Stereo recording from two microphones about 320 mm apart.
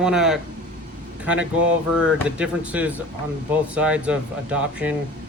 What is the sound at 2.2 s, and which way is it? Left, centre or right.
Speech, centre.